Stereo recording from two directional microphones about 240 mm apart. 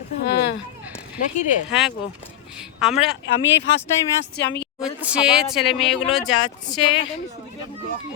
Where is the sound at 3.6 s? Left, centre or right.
Left.